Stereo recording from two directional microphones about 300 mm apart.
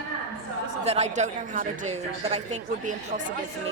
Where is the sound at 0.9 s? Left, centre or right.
Right.